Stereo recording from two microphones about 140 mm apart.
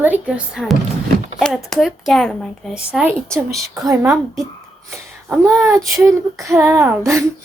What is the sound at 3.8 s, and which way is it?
Speech, 20° right (ahead or behind).